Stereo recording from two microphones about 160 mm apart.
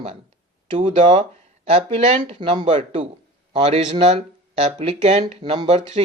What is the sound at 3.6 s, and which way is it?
Speech, 40° right (ahead or behind).